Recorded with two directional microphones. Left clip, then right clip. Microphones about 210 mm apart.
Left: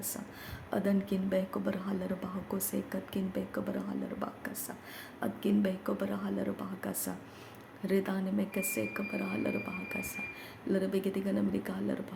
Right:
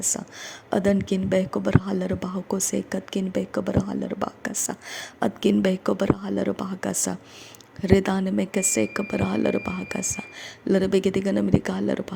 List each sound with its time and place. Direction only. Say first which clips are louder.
0.7 s speech: right 10 dB; 40° right (ahead or behind)